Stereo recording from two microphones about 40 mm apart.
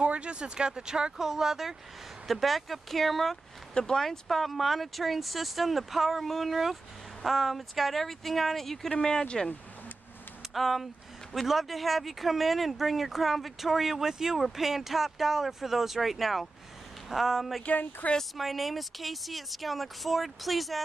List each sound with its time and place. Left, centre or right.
0.0 s speech: right
1.1 s speech: centre
2.2 s speech: centre
3.7 s speech: centre
4.3 s speech: centre
17.6 s speech: left
18.3 s speech: centre